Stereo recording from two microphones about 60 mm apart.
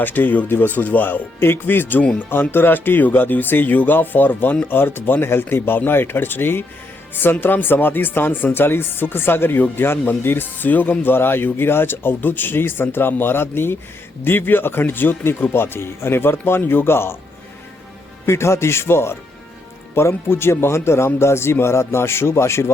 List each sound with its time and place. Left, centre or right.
0.0 s speech: left
18.3 s speech: left